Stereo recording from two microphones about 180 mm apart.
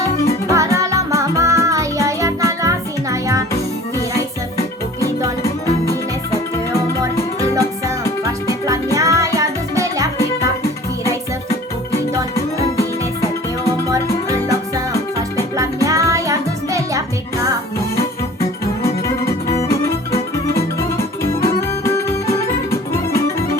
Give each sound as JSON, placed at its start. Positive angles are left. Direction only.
{"t": 0.5, "sound": "music", "side_deg": -20}
{"t": 5.4, "sound": "music", "side_deg": 15}
{"t": 8.2, "sound": "music", "side_deg": -20}
{"t": 15.5, "sound": "music", "side_deg": -20}
{"t": 20.5, "sound": "music", "side_deg": 15}